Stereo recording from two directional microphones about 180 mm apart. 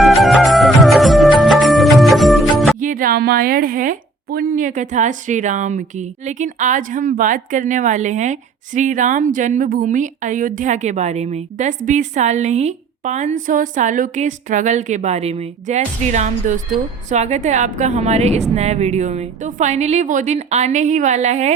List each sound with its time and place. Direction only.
0.0 s music: centre (ahead or behind)
2.8 s a woman's voice: 50° right (ahead or behind)